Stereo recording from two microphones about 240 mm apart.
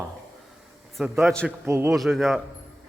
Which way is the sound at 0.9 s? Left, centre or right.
Centre.